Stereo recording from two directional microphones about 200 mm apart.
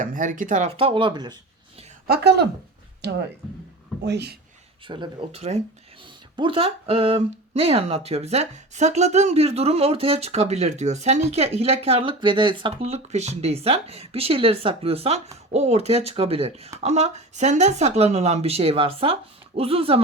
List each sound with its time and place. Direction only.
0.0 s speech: 40° right (ahead or behind)
0.8 s speech: 25° right (ahead or behind)
2.0 s speech: 55° right (ahead or behind)
4.9 s speech: 25° right (ahead or behind)